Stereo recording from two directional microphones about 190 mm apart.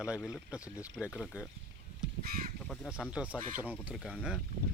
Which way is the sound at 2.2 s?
50° right (ahead or behind).